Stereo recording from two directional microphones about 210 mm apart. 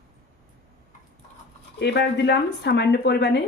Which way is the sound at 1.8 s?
55° left (ahead or behind).